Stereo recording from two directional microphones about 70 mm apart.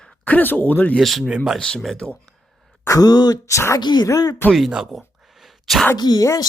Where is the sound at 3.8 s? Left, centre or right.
Left.